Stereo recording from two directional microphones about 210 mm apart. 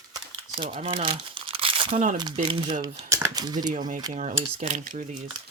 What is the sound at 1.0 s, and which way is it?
Crumpling, 25° right (ahead or behind).